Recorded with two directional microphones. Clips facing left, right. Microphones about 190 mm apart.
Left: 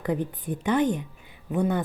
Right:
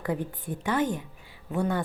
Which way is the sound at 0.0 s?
20° left (ahead or behind).